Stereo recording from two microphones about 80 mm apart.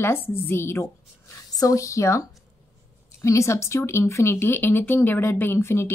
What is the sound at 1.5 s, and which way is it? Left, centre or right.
Speech, left.